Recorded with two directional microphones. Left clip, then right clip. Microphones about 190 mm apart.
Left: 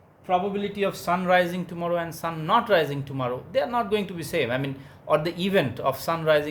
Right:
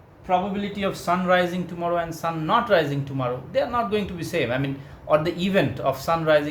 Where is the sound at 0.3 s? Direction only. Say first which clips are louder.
Right 1 dB; 45° left (ahead or behind).